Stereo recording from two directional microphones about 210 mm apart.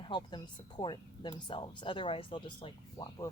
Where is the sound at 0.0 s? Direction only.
20° left (ahead or behind).